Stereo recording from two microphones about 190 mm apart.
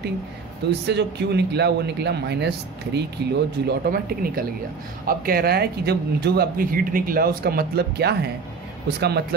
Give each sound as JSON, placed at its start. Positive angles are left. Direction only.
{"t": 0.7, "sound": "speech", "side_deg": -60}
{"t": 3.6, "sound": "speech", "side_deg": -50}